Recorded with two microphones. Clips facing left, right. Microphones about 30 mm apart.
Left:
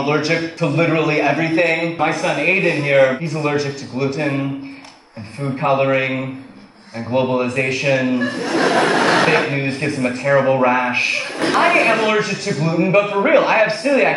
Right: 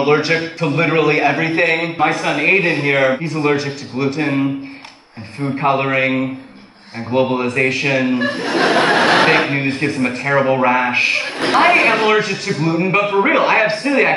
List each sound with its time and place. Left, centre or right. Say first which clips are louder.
0.0 s a man's voice: right 3 dB; centre
8.2 s speech: right 1 dB; right
9.6 s a man's voice: right 2 dB; centre